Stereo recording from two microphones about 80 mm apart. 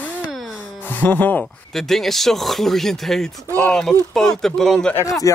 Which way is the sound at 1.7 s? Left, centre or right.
Centre.